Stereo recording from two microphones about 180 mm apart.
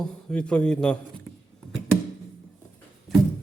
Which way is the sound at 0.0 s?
5° left (ahead or behind).